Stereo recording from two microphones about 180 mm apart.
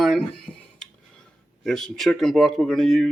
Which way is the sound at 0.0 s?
Centre (ahead or behind).